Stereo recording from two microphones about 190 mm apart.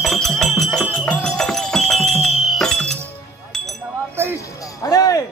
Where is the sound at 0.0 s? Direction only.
Centre (ahead or behind).